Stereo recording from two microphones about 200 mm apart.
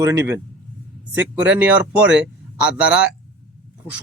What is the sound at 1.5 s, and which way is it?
A man's voice, 5° right (ahead or behind).